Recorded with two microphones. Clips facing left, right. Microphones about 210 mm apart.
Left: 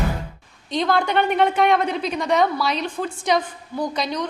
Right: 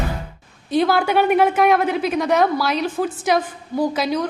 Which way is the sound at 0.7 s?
5° right (ahead or behind).